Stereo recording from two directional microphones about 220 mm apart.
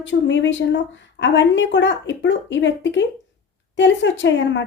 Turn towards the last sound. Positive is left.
turn(degrees=55)  # may be behind; listen again after turning